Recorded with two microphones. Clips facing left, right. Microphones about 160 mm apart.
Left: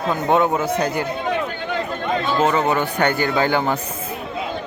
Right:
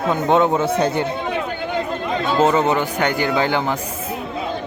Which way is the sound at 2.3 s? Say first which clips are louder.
Right 3 dB; 25° right (ahead or behind).